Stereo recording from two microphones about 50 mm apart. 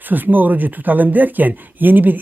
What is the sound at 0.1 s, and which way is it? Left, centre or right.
Speech, right.